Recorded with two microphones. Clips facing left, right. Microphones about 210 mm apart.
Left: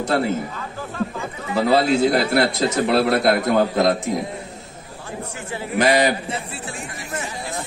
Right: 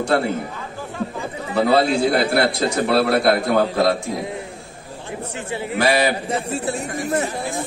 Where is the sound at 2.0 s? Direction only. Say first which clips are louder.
Even; 20° left (ahead or behind).